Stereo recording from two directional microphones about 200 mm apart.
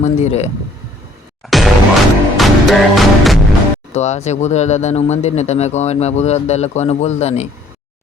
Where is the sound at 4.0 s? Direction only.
35° left (ahead or behind).